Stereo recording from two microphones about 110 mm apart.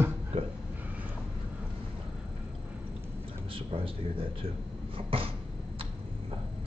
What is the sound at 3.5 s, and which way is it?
Speech, 55° right (ahead or behind).